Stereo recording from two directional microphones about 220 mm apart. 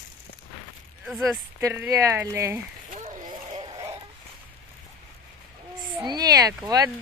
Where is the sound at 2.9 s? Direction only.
30° right (ahead or behind).